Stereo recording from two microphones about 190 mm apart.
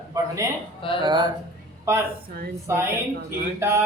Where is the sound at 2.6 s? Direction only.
15° right (ahead or behind).